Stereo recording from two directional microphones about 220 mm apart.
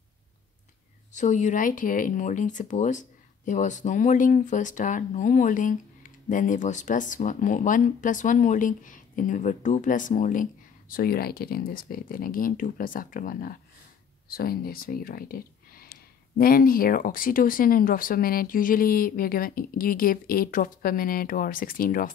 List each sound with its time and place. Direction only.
1.1 s speech: 35° left (ahead or behind)